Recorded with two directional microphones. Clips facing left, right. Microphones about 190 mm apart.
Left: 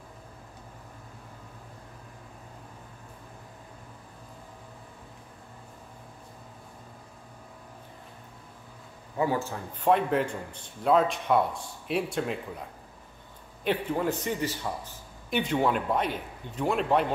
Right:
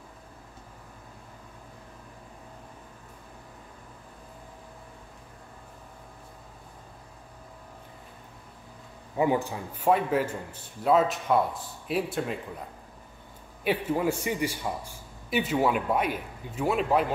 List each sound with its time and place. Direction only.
9.1 s speech: 15° right (ahead or behind)
9.8 s a man's voice: 5° right (ahead or behind)
13.7 s speech: 10° right (ahead or behind)